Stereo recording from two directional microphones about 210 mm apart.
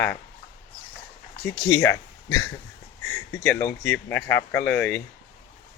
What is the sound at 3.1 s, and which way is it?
Speech, 10° left (ahead or behind).